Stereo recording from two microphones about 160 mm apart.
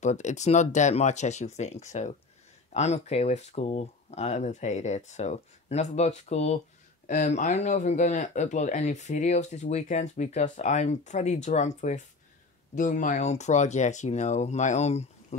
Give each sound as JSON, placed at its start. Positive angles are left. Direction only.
{"t": 0.0, "sound": "speech", "side_deg": 45}